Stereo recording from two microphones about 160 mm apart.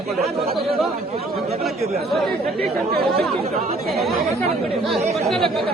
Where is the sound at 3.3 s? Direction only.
40° right (ahead or behind).